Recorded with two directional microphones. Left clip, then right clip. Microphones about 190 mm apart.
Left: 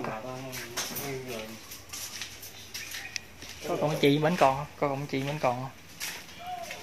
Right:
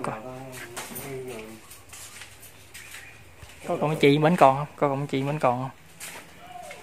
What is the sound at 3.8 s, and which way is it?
Speech, 30° right (ahead or behind).